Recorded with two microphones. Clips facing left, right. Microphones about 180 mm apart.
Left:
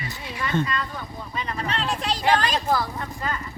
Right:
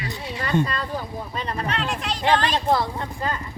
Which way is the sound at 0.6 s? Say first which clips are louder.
Right 2 dB; 35° right (ahead or behind).